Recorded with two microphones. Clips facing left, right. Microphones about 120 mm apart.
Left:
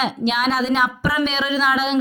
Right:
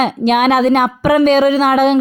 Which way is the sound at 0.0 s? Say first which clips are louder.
Right 8 dB; 55° right (ahead or behind).